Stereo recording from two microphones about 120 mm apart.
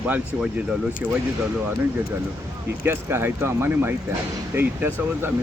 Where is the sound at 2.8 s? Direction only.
20° right (ahead or behind).